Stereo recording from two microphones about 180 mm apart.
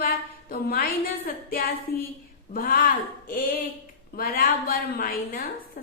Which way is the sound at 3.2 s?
50° left (ahead or behind).